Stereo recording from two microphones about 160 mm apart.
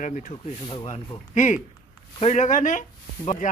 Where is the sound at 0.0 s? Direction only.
55° left (ahead or behind).